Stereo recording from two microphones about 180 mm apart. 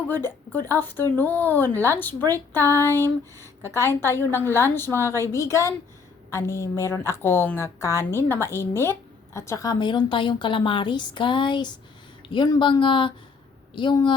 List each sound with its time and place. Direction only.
0.1 s speech: 10° left (ahead or behind)